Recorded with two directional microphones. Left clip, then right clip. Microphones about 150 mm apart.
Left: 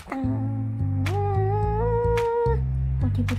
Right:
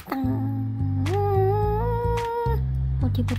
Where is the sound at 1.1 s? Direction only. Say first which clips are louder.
Right 4 dB; centre (ahead or behind).